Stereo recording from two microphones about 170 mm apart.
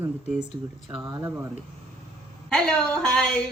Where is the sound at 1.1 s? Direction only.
15° right (ahead or behind).